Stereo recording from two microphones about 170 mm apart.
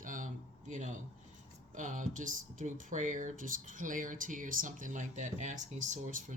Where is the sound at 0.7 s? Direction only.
45° right (ahead or behind).